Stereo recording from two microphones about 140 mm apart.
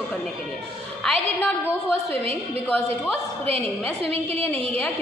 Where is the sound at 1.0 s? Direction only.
5° left (ahead or behind).